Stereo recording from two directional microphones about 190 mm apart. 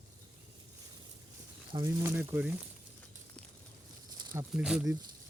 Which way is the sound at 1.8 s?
10° right (ahead or behind).